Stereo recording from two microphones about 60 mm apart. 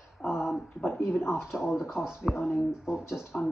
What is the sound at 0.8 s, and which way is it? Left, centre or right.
Speech, left.